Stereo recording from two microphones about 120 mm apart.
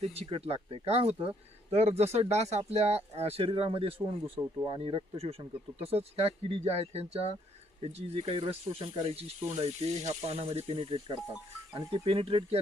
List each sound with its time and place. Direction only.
0.0 s speech: 60° right (ahead or behind)